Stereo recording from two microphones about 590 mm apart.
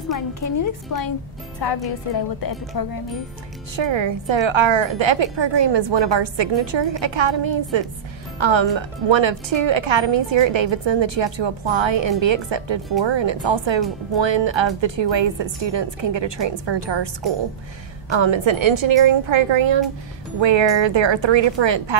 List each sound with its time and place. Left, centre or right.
0.3 s a woman's voice: left
3.7 s speech: right
18.1 s speech: right